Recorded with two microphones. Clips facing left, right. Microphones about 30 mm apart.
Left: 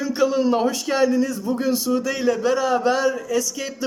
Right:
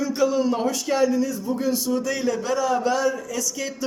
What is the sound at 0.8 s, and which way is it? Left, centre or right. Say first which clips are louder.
Speech: right 1 dB; left.